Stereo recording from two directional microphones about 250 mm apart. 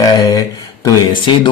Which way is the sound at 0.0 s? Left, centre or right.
Centre.